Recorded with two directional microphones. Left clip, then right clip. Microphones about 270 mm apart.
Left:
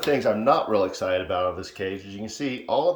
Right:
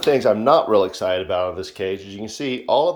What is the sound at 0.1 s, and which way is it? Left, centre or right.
Speech, centre.